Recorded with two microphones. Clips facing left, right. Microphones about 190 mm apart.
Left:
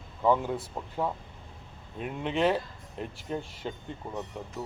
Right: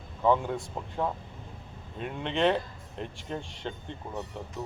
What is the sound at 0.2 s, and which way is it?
Speech, 5° left (ahead or behind).